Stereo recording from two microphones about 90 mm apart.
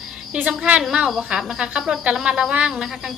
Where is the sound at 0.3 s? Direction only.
10° right (ahead or behind).